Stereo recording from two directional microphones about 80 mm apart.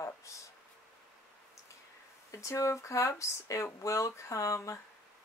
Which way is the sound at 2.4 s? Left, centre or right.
Left.